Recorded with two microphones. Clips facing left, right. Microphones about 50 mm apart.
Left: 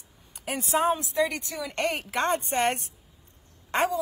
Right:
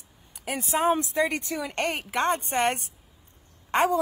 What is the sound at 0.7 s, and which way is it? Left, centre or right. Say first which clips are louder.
Speech: even; centre.